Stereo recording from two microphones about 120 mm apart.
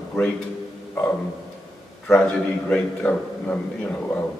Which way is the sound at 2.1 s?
10° left (ahead or behind).